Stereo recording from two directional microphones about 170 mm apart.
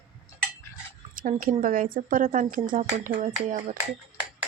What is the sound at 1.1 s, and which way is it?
A woman's voice, 55° right (ahead or behind).